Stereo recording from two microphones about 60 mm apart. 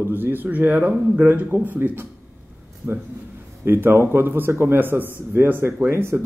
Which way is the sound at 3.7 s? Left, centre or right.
Right.